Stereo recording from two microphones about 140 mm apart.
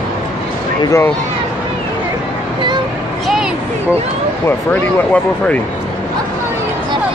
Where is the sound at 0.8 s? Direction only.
20° left (ahead or behind).